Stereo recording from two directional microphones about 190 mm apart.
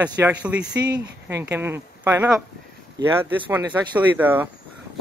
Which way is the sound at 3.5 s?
10° right (ahead or behind).